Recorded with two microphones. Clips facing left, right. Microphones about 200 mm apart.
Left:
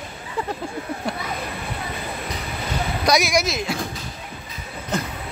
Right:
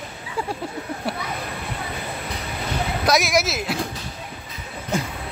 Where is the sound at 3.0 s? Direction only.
Centre (ahead or behind).